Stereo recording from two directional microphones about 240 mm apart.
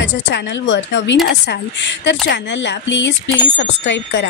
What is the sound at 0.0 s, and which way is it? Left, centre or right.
Speech, left.